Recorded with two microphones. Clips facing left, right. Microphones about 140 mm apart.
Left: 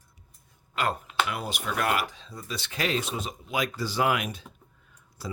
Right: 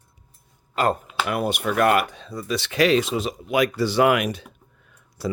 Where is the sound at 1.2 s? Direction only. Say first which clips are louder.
Right 8 dB; 60° right (ahead or behind).